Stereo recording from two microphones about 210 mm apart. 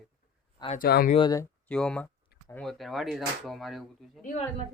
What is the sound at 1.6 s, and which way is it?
Speech, 5° left (ahead or behind).